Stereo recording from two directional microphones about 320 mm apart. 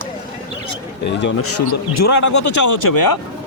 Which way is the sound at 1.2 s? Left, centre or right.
Left.